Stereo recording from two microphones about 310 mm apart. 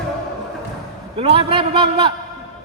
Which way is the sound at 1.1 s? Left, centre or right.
Centre.